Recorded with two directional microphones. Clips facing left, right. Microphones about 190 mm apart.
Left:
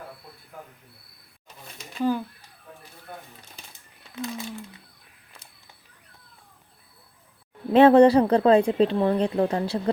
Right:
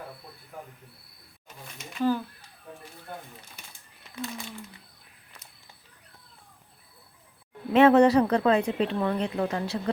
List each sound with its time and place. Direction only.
2.0 s speech: 15° left (ahead or behind)
7.7 s speech: 30° left (ahead or behind)